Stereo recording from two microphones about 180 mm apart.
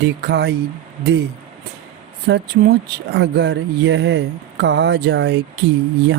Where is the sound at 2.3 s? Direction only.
70° right (ahead or behind).